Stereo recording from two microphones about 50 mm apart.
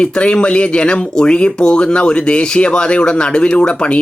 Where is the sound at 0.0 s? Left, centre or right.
Left.